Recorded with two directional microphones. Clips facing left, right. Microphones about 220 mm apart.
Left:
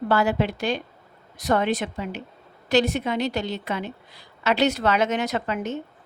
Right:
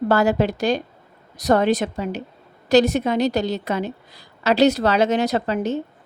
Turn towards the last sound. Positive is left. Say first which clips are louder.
# right 5 dB
turn(degrees=-35)  # may be behind; listen again after turning